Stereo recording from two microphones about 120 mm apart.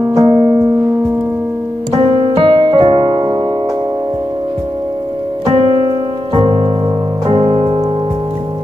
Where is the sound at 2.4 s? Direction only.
45° right (ahead or behind).